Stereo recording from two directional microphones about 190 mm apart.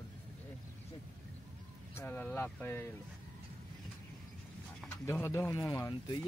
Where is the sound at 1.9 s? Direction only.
10° left (ahead or behind).